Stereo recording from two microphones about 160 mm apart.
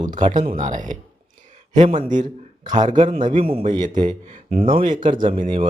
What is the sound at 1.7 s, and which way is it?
Speech, 30° right (ahead or behind).